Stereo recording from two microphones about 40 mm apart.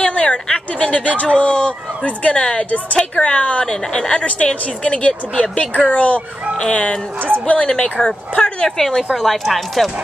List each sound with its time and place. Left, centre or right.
0.0 s a sound: left
0.5 s speech: left
3.6 s a woman's voice: centre
4.1 s speech: left
6.5 s speech: left
7.2 s speech: right
7.6 s speech: centre
8.6 s speech: centre